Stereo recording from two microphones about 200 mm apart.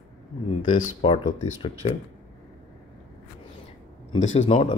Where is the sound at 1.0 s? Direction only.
25° left (ahead or behind).